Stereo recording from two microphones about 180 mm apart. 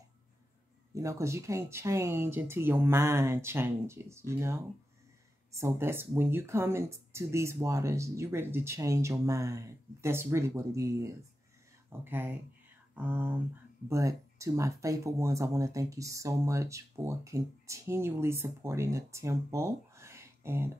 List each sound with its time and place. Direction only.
0.9 s speech: 15° right (ahead or behind)
5.6 s speech: 15° right (ahead or behind)